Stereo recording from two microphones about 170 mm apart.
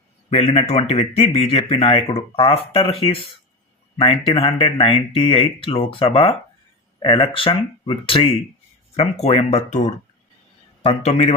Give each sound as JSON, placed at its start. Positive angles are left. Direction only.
{"t": 0.3, "sound": "speech", "side_deg": 35}